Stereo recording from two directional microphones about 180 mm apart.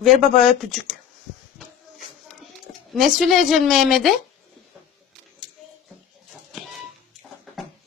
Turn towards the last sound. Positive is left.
turn(degrees=0)  # may be behind; listen again after turning